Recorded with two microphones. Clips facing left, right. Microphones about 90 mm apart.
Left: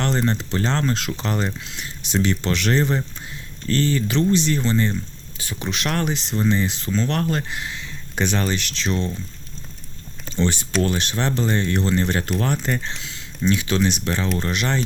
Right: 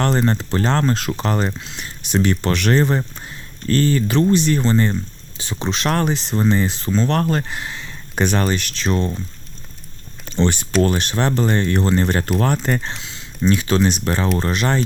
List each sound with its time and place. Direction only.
0.0 s speech: 50° right (ahead or behind)
5.4 s speech: 30° right (ahead or behind); by 9.1 s 50° right (ahead or behind)
10.2 s speech: 60° right (ahead or behind)
13.4 s speech: 40° right (ahead or behind)